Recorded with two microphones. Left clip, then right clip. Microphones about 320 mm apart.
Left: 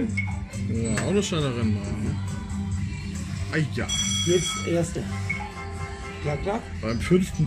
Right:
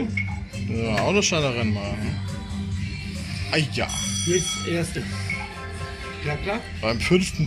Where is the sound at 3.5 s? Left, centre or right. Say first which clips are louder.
Right 5 dB; centre.